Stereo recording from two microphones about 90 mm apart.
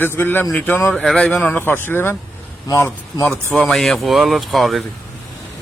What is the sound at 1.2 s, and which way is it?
A man's voice, 15° left (ahead or behind).